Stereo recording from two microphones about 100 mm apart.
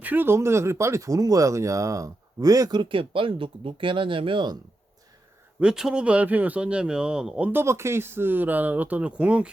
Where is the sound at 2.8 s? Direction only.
60° right (ahead or behind).